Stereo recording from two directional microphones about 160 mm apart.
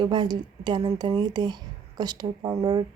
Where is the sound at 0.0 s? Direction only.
30° right (ahead or behind).